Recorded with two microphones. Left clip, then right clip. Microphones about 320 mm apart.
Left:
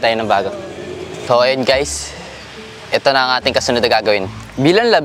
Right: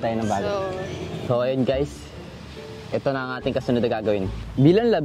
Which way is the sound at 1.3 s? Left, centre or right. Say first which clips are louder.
Left 10 dB; left.